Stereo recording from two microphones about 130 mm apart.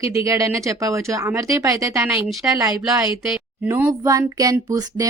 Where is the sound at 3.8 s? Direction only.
25° right (ahead or behind).